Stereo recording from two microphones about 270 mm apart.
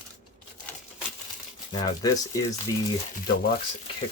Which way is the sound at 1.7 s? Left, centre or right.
Centre.